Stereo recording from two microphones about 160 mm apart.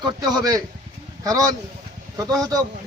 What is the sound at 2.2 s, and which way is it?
Speech, 20° right (ahead or behind).